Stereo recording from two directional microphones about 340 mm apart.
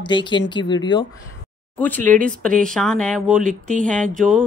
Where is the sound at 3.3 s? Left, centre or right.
Right.